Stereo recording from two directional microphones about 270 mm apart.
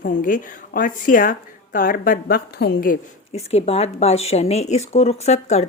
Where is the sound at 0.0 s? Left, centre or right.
Left.